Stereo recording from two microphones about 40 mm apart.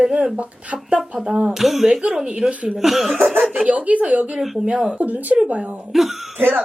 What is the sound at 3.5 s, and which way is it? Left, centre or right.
Speech, right.